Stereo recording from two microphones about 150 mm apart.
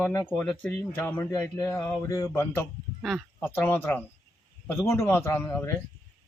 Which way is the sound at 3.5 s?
10° left (ahead or behind).